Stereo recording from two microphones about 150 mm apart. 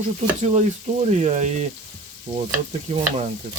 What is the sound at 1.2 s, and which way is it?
Speech, 50° right (ahead or behind).